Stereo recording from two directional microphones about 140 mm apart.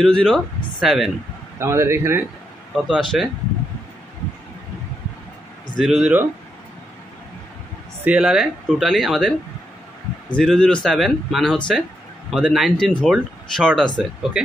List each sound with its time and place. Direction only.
0.0 s speech: 5° left (ahead or behind)
1.6 s speech: 20° right (ahead or behind)
2.7 s speech: centre (ahead or behind)
5.8 s speech: centre (ahead or behind)
8.0 s speech: 10° right (ahead or behind)
10.3 s speech: 5° left (ahead or behind)